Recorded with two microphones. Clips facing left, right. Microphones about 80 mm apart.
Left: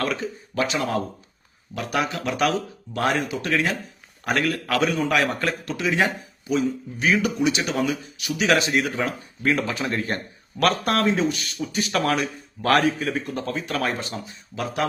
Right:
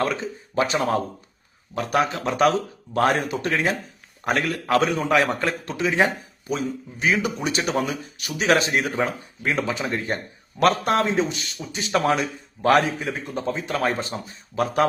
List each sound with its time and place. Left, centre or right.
0.0 s speech: right
0.7 s speech: right
7.0 s speech: centre
7.4 s speech: right
9.4 s speech: centre
10.6 s speech: right